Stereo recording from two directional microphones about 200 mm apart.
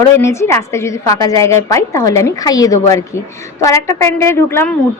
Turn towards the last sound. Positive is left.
turn(degrees=10)  # may be behind; listen again after turning